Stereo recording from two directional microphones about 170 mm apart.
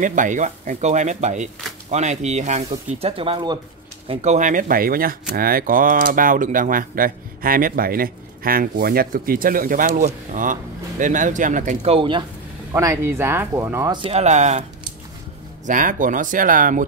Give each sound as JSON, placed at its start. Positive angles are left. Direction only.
{"t": 0.0, "sound": "speech", "side_deg": -50}
{"t": 4.1, "sound": "speech", "side_deg": -40}
{"t": 12.7, "sound": "speech", "side_deg": -15}
{"t": 14.0, "sound": "speech", "side_deg": -40}
{"t": 15.6, "sound": "speech", "side_deg": -50}